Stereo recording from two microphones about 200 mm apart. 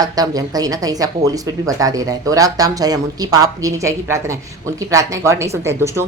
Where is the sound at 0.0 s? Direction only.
20° right (ahead or behind).